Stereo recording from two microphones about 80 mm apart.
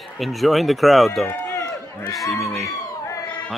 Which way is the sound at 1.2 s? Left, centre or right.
Left.